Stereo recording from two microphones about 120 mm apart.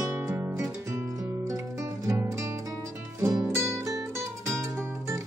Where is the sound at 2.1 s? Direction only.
25° right (ahead or behind).